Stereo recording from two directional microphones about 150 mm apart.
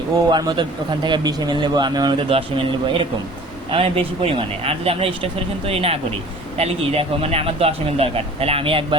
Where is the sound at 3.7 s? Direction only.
40° right (ahead or behind).